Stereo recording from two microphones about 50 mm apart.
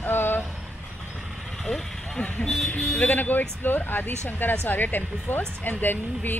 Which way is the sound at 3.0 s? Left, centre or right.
Left.